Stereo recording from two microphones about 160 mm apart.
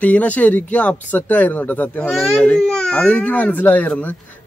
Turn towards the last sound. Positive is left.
turn(degrees=10)  # may be behind; listen again after turning